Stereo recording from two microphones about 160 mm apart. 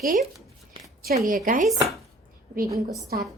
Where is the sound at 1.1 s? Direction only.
60° right (ahead or behind).